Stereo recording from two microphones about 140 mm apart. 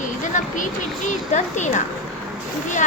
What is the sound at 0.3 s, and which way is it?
Speech, 65° left (ahead or behind).